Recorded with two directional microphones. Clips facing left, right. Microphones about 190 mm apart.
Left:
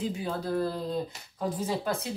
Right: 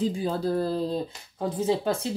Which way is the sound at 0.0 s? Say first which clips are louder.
Right 5 dB; 30° right (ahead or behind).